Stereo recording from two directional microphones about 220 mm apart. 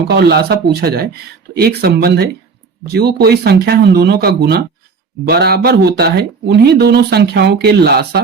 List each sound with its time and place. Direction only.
0.1 s speech: 45° right (ahead or behind)